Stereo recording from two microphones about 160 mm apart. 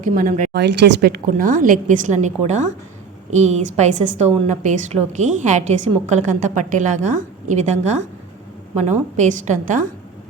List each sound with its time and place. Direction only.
0.0 s speech: 55° right (ahead or behind)
0.5 s a woman's voice: 90° right; by 7.6 s 50° right (ahead or behind)
8.7 s a woman's voice: 45° right (ahead or behind)